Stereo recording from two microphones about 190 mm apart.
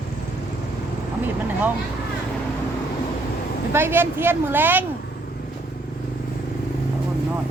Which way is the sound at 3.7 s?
10° right (ahead or behind).